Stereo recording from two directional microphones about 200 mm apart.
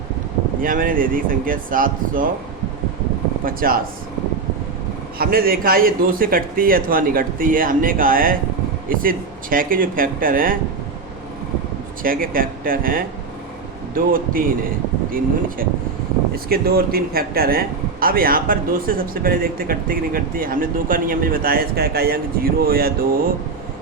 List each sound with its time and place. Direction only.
0.6 s speech: 45° right (ahead or behind)
3.4 s speech: 45° right (ahead or behind)
5.1 s speech: 45° right (ahead or behind)
12.0 s speech: 45° right (ahead or behind)
16.3 s speech: 50° right (ahead or behind)